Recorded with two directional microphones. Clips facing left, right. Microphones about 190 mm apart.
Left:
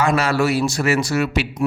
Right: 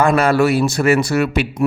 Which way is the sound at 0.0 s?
55° right (ahead or behind).